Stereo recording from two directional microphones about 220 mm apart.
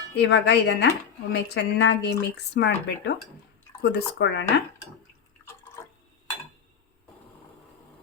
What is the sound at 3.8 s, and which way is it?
Speech, 50° left (ahead or behind).